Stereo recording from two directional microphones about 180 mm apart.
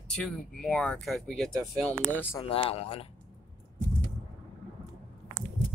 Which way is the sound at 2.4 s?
30° left (ahead or behind).